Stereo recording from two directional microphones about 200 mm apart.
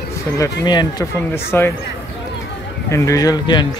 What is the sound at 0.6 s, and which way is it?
Speech, 20° left (ahead or behind).